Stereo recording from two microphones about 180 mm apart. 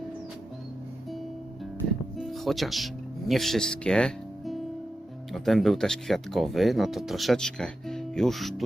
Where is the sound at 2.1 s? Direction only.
Centre (ahead or behind).